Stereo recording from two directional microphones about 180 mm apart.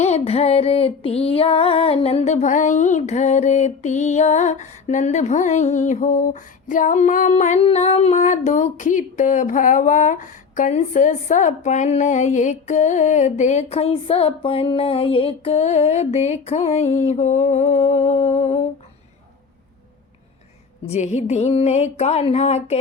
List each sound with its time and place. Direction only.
0.0 s music: 35° left (ahead or behind)
20.8 s music: 40° left (ahead or behind)